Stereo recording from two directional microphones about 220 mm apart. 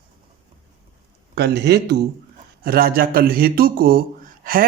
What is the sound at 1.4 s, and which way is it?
A man's voice, 50° right (ahead or behind).